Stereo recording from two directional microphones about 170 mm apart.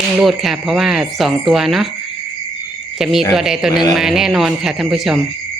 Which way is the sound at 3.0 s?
Centre (ahead or behind).